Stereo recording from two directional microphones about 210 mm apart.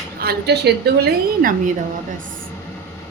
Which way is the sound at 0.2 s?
50° right (ahead or behind).